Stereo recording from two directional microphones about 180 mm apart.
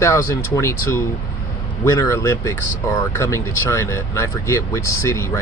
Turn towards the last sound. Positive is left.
turn(degrees=15)  # may be behind; listen again after turning